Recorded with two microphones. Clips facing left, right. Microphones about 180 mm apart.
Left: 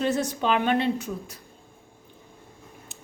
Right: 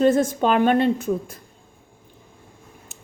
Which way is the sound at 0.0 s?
50° right (ahead or behind).